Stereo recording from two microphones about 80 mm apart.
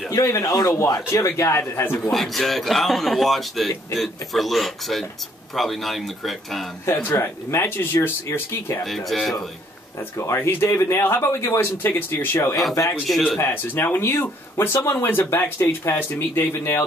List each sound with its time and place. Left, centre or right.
0.1 s a man's voice: left
0.9 s speech: left
1.6 s speech: left
2.0 s speech: centre
6.9 s speech: left
8.8 s speech: centre
10.1 s speech: left
13.0 s speech: centre
13.4 s speech: left